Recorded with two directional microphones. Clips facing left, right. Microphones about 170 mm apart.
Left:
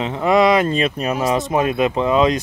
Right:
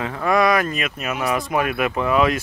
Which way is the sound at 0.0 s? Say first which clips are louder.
Left 4 dB; 20° left (ahead or behind).